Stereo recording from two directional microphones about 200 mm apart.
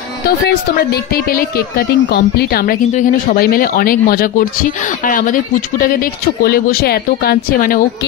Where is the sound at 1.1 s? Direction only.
45° left (ahead or behind).